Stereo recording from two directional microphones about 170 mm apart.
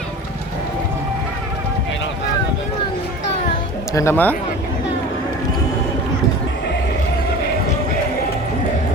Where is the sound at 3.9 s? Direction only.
15° left (ahead or behind).